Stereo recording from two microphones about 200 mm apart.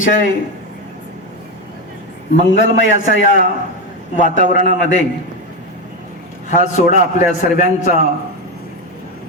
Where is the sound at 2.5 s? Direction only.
70° left (ahead or behind).